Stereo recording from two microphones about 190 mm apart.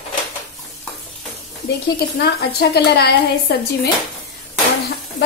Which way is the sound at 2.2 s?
60° left (ahead or behind).